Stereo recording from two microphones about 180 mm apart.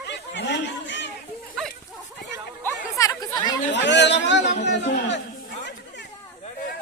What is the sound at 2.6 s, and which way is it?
Chatter, 15° left (ahead or behind).